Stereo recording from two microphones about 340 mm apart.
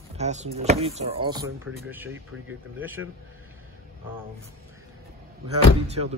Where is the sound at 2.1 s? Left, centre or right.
Right.